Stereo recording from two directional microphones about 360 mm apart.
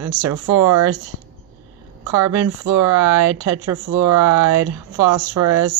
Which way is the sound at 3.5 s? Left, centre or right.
Right.